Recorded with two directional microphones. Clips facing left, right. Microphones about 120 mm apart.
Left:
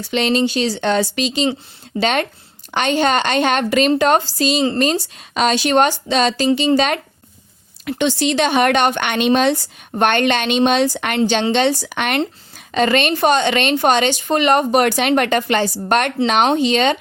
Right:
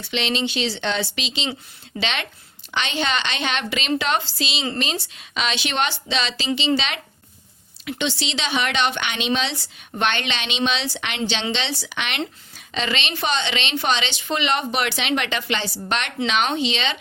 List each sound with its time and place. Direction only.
0.0 s speech: 45° left (ahead or behind)